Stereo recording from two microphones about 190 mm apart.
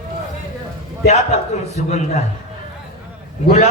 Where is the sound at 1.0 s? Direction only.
35° left (ahead or behind).